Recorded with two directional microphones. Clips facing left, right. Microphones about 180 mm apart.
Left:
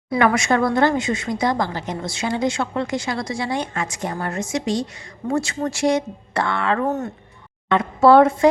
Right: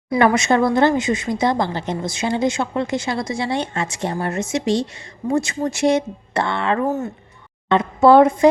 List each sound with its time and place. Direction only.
0.3 s a woman's voice: 25° right (ahead or behind)
6.8 s speech: 10° right (ahead or behind)
7.7 s a woman's voice: 20° right (ahead or behind)